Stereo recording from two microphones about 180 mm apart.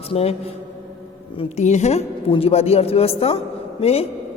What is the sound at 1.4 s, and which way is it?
A man's voice, 40° left (ahead or behind).